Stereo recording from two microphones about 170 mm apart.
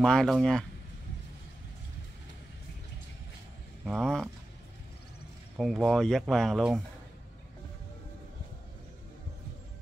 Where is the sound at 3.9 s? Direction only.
5° left (ahead or behind).